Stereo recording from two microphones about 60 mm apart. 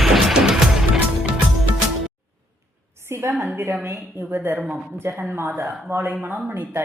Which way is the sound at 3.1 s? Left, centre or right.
Right.